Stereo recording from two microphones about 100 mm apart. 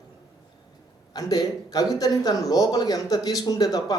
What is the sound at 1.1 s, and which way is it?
A man's voice, 40° left (ahead or behind).